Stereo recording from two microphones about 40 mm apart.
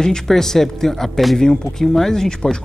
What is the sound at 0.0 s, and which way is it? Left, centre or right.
Speech, centre.